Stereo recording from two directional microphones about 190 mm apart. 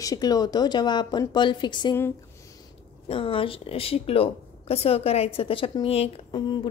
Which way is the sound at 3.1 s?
30° left (ahead or behind).